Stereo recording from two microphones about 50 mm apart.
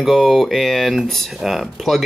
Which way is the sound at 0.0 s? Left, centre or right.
Centre.